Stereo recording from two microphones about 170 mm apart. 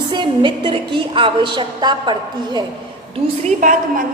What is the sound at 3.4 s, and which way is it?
Speech, 50° right (ahead or behind).